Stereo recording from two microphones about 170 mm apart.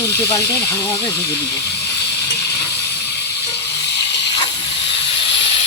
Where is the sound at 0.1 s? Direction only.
10° left (ahead or behind).